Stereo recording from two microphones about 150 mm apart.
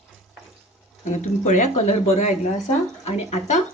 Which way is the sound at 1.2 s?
50° left (ahead or behind).